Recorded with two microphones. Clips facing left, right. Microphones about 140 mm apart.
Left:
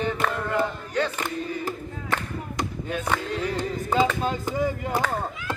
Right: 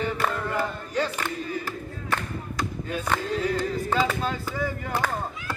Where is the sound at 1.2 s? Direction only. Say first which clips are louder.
Left 2 dB; 20° left (ahead or behind).